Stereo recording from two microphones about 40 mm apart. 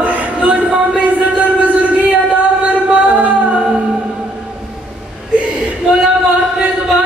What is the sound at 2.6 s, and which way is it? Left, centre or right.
Music, right.